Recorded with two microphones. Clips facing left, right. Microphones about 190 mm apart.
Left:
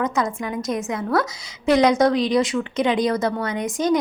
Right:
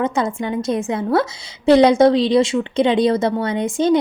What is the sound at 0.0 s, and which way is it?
A woman's voice, 30° right (ahead or behind).